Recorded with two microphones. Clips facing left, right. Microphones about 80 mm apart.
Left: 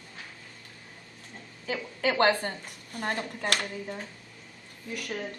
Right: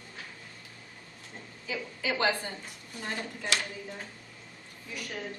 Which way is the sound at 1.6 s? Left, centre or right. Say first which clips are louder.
Left 5 dB; left.